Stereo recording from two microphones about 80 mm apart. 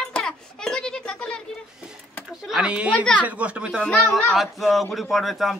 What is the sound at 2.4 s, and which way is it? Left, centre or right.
Speech, centre.